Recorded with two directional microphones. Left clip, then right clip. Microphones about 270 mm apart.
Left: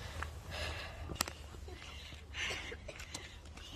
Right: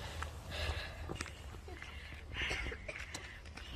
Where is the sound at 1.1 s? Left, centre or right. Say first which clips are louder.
Left 7 dB; right.